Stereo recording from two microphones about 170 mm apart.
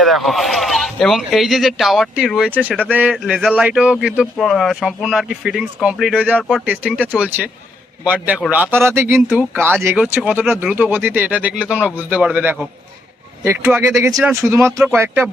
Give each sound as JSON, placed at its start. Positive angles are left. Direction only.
{"t": 0.0, "sound": "a man's voice", "side_deg": 0}